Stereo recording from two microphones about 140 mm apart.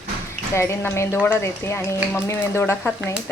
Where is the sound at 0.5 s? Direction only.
20° left (ahead or behind).